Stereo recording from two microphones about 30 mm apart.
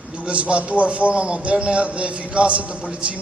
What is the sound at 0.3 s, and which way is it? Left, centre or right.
A man's voice, right.